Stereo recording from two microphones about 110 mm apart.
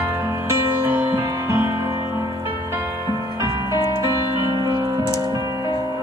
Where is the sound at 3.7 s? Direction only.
35° left (ahead or behind).